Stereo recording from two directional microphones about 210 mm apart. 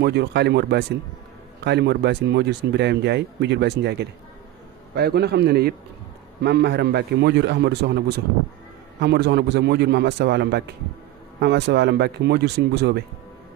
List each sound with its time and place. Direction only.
0.0 s speech: 50° right (ahead or behind)
9.0 s speech: 50° right (ahead or behind)